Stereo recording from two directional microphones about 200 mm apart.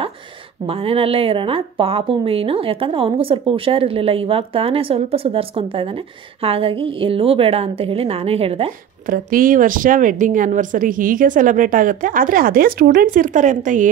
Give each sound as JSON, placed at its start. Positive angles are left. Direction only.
{"t": 0.7, "sound": "a woman's voice", "side_deg": -30}
{"t": 9.1, "sound": "a woman's voice", "side_deg": -45}